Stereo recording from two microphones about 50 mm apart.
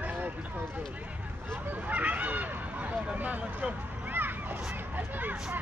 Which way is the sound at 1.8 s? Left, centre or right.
Right.